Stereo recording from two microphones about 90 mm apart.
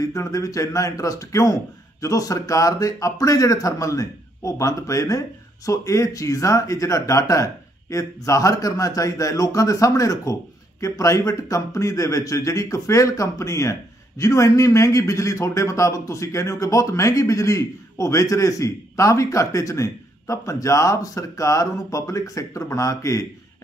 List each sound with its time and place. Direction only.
0.0 s a man's voice: 35° left (ahead or behind)